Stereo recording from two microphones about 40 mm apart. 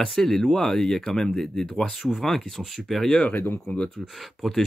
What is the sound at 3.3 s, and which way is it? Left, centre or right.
Speech, left.